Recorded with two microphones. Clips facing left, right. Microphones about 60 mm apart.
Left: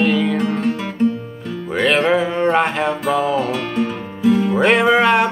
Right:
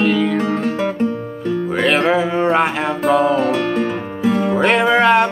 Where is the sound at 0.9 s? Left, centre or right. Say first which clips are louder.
Left 1 dB; right.